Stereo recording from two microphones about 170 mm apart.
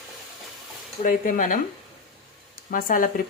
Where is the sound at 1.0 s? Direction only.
50° left (ahead or behind).